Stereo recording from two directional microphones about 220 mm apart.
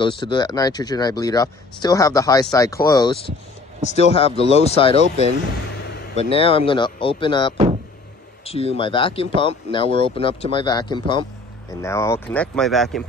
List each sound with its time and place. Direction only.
0.0 s speech: 20° left (ahead or behind)
6.3 s speech: 25° left (ahead or behind); by 13.0 s centre (ahead or behind)